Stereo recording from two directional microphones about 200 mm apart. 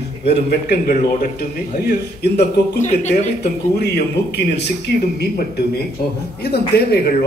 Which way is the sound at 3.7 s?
55° left (ahead or behind).